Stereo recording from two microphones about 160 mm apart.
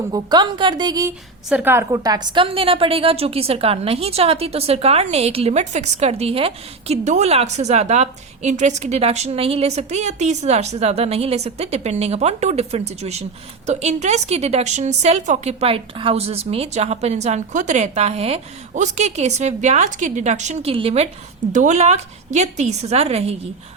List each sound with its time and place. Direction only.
0.1 s a woman's voice: 25° right (ahead or behind)
1.5 s a woman's voice: 10° right (ahead or behind); by 23.3 s 40° right (ahead or behind)